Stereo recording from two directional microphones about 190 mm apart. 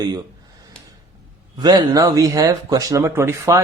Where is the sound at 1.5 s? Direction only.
20° right (ahead or behind).